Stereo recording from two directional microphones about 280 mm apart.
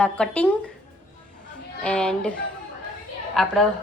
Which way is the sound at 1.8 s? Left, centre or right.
Centre.